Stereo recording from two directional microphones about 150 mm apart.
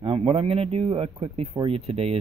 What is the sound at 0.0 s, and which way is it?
Speech, 35° right (ahead or behind).